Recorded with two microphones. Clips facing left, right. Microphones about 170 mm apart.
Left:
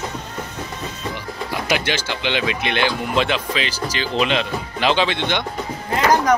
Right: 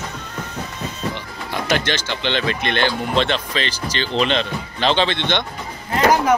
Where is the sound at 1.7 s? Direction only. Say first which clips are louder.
Right 1 dB; 10° left (ahead or behind).